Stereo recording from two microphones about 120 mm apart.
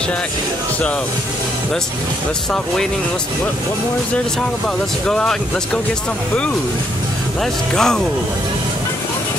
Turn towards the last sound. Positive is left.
turn(degrees=5)  # may be behind; listen again after turning